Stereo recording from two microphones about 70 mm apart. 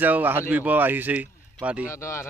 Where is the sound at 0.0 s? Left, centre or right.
Right.